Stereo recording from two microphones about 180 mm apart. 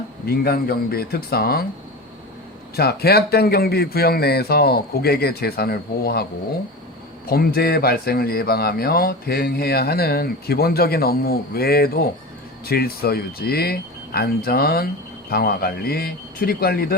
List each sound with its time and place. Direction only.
0.3 s speech: 60° left (ahead or behind)
2.7 s speech: 60° left (ahead or behind)
7.3 s speech: 55° left (ahead or behind)